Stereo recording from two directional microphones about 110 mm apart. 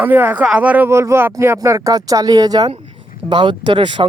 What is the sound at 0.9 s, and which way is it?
Speech, 25° right (ahead or behind).